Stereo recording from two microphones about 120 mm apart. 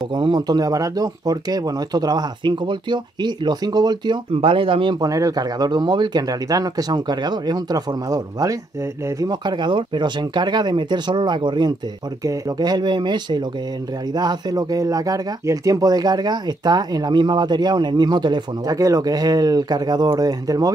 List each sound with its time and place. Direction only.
0.1 s speech: 40° right (ahead or behind)
4.3 s speech: 50° right (ahead or behind)
5.0 s speech: 30° right (ahead or behind)